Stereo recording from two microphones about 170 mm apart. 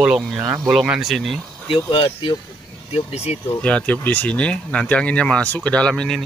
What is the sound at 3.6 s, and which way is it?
Speech, 10° left (ahead or behind).